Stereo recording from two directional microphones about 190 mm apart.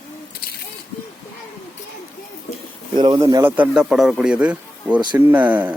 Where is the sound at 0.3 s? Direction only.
55° left (ahead or behind).